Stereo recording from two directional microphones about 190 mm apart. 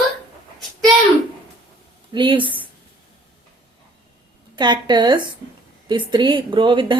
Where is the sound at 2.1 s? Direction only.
25° right (ahead or behind).